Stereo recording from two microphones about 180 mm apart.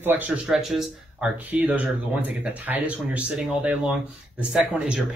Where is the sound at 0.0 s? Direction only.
10° right (ahead or behind).